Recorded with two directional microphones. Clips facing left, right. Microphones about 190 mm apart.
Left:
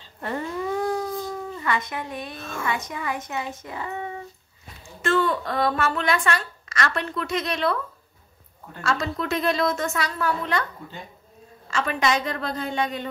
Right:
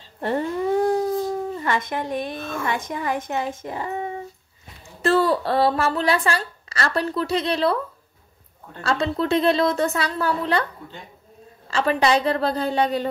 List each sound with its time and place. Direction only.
0.2 s a sound: 35° right (ahead or behind)
1.5 s dog: 35° right (ahead or behind)
2.0 s a woman's voice: 45° right (ahead or behind)
3.6 s speech: 35° right (ahead or behind)
8.8 s a woman's voice: 30° right (ahead or behind)
11.6 s a woman's voice: 35° right (ahead or behind)